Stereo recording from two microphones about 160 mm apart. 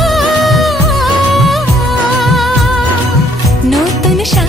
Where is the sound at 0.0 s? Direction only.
Centre (ahead or behind).